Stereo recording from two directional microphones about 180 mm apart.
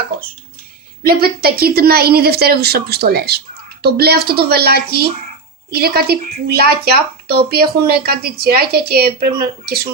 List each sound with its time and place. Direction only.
1.0 s speech: 55° right (ahead or behind)